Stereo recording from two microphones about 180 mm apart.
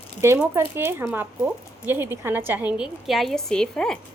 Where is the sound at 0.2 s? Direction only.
15° right (ahead or behind).